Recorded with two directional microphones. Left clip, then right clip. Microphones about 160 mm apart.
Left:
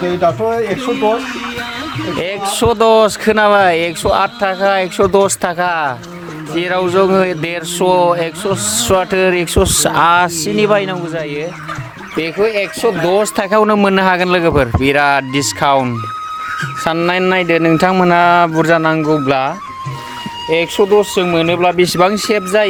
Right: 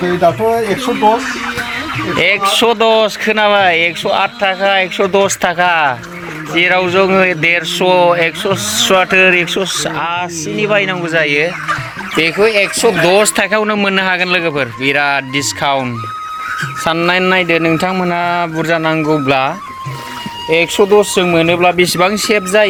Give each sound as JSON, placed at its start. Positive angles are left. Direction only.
{"t": 0.0, "sound": "speech", "side_deg": 0}
{"t": 2.1, "sound": "speech", "side_deg": 25}
{"t": 10.6, "sound": "speech", "side_deg": 40}
{"t": 11.1, "sound": "speech", "side_deg": 0}
{"t": 13.0, "sound": "speech", "side_deg": 20}
{"t": 13.2, "sound": "speech", "side_deg": 40}
{"t": 16.8, "sound": "speech", "side_deg": 35}
{"t": 17.7, "sound": "speech", "side_deg": 65}
{"t": 18.8, "sound": "speech", "side_deg": 35}
{"t": 19.2, "sound": "speech", "side_deg": 25}
{"t": 21.0, "sound": "speech", "side_deg": 10}
{"t": 21.8, "sound": "speech", "side_deg": 40}